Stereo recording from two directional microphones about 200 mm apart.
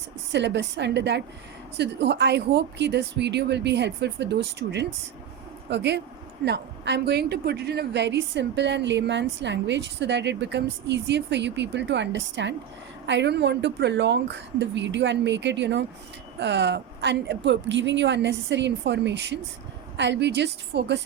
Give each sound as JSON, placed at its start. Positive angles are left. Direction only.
{"t": 0.3, "sound": "a woman's voice", "side_deg": -60}